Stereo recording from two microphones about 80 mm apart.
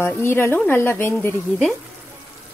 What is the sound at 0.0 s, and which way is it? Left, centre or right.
A woman's voice, left.